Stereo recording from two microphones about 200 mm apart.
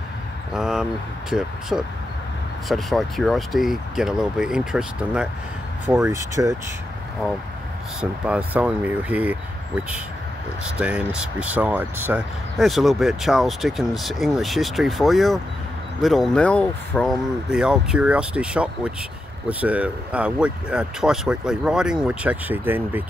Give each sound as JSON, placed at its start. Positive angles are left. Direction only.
{"t": 0.5, "sound": "speech", "side_deg": -5}
{"t": 5.9, "sound": "speech", "side_deg": -15}
{"t": 8.0, "sound": "speech", "side_deg": -5}